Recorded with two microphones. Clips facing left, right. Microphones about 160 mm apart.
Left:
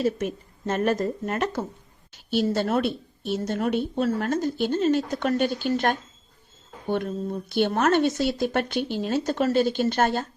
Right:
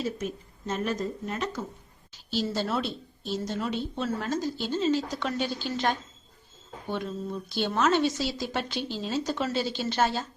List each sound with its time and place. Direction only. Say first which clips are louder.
0.0 s speech: left 6 dB; 55° left (ahead or behind)